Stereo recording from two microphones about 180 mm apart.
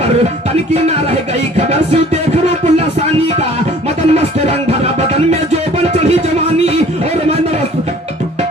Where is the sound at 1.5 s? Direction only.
35° right (ahead or behind).